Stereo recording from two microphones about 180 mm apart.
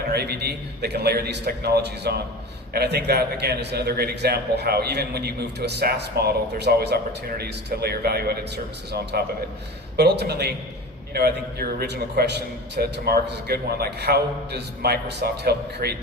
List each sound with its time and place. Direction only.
0.1 s a man's voice: 65° right (ahead or behind)